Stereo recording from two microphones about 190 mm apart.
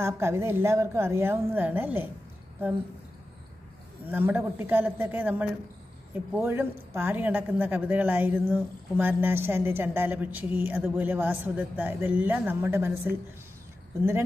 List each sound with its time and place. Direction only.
0.0 s speech: 15° right (ahead or behind)
4.1 s speech: 10° right (ahead or behind)